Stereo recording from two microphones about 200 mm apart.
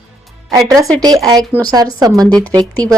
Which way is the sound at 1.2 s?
20° right (ahead or behind).